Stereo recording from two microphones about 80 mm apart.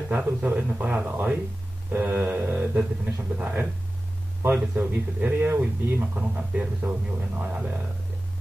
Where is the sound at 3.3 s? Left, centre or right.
Right.